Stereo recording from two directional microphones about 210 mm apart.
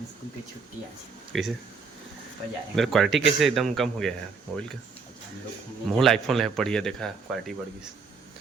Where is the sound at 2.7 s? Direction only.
Centre (ahead or behind).